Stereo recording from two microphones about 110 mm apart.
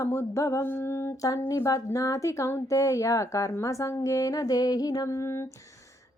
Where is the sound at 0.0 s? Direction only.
25° left (ahead or behind).